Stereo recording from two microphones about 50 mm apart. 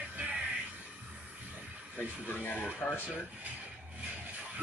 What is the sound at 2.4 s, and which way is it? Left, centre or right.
Speech, left.